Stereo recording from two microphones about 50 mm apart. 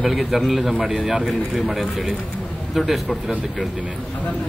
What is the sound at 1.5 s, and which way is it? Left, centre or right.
A man's voice, centre.